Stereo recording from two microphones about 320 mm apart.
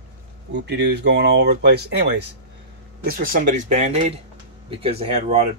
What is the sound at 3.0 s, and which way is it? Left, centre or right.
Speech, right.